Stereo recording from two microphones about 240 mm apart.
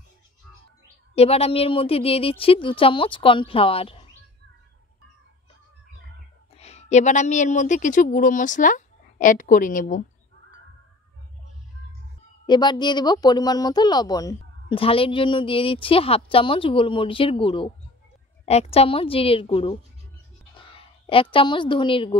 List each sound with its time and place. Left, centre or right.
1.1 s speech: left
6.5 s a woman's voice: left
12.4 s a woman's voice: centre